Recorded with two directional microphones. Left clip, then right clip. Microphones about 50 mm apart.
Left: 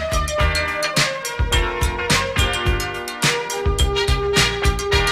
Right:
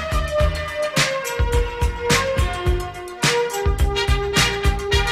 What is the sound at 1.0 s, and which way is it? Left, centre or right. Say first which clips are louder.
Music: even; right.